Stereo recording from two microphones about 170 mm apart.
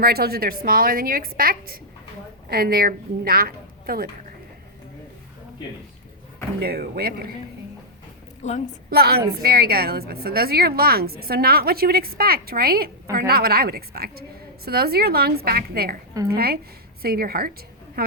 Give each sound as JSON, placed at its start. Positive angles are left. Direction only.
{"t": 0.0, "sound": "a woman's voice", "side_deg": -65}
{"t": 6.6, "sound": "a woman's voice", "side_deg": -65}
{"t": 8.4, "sound": "a woman's voice", "side_deg": 45}
{"t": 8.9, "sound": "a woman's voice", "side_deg": -70}